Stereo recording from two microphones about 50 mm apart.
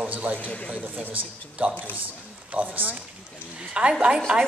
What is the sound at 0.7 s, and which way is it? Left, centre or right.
A man's voice, right.